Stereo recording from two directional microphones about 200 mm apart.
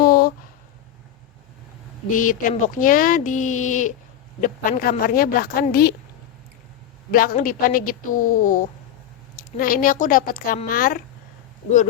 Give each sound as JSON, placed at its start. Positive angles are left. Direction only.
{"t": 0.0, "sound": "a sound", "side_deg": 45}
{"t": 2.1, "sound": "a woman's voice", "side_deg": 40}
{"t": 7.1, "sound": "a woman's voice", "side_deg": 45}